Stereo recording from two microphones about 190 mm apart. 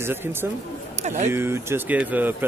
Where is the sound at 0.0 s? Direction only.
10° right (ahead or behind).